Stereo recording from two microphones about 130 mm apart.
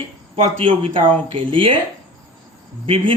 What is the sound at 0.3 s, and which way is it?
Speech, 45° right (ahead or behind).